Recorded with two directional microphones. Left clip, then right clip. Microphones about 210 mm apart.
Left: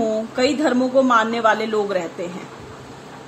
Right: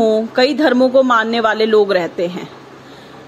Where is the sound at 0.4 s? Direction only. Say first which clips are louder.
Right 5 dB; 30° right (ahead or behind).